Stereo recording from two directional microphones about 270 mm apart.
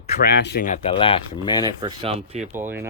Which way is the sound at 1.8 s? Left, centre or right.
Right.